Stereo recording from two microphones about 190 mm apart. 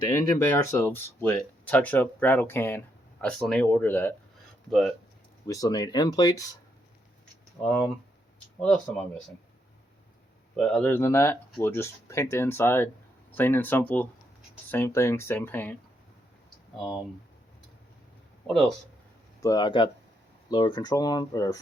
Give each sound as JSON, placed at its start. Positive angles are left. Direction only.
{"t": 0.1, "sound": "speech", "side_deg": 10}
{"t": 4.7, "sound": "speech", "side_deg": 0}
{"t": 5.5, "sound": "speech", "side_deg": 20}
{"t": 7.6, "sound": "speech", "side_deg": 10}
{"t": 10.5, "sound": "speech", "side_deg": 5}
{"t": 18.4, "sound": "speech", "side_deg": 0}
{"t": 19.4, "sound": "speech", "side_deg": 20}